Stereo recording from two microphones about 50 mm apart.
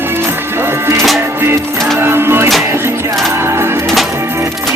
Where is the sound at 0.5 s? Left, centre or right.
Right.